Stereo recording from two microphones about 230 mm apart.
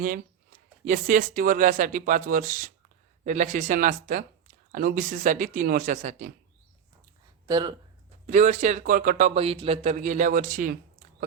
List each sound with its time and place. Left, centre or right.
0.9 s a man's voice: right
7.4 s speech: centre
8.3 s a man's voice: right